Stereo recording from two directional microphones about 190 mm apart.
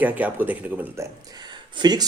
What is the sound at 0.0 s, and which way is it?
A man's voice, 10° right (ahead or behind).